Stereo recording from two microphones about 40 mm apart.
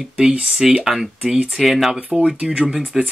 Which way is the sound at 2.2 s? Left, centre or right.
Right.